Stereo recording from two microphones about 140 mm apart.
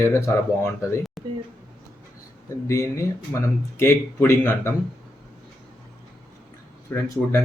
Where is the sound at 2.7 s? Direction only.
20° left (ahead or behind).